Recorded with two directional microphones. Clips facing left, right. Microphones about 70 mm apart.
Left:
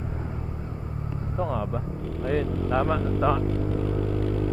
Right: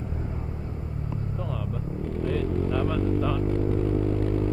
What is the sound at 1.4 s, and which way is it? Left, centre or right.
Vehicle, left.